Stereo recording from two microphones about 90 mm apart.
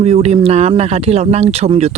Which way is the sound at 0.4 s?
90° right.